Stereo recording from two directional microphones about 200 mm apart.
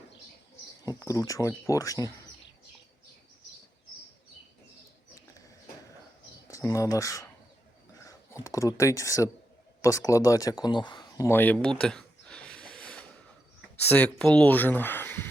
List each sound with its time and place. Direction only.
0.9 s speech: 15° left (ahead or behind)
6.5 s speech: 15° left (ahead or behind)